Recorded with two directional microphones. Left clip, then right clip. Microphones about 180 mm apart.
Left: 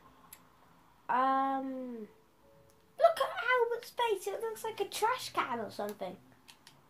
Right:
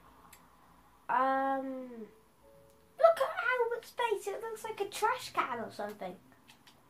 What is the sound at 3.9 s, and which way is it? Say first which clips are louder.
Speech: left 1 dB; 50° left (ahead or behind).